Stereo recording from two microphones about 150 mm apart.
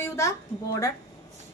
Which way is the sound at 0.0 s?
20° left (ahead or behind).